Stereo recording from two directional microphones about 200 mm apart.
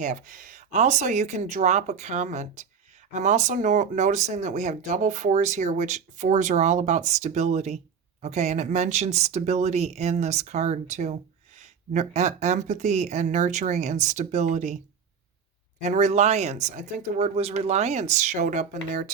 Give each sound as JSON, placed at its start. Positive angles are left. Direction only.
{"t": 0.0, "sound": "speech", "side_deg": -40}
{"t": 15.8, "sound": "speech", "side_deg": -35}